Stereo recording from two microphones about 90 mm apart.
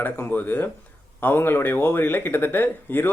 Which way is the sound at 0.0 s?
20° left (ahead or behind).